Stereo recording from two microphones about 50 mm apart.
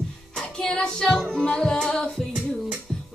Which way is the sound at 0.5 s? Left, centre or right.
Centre.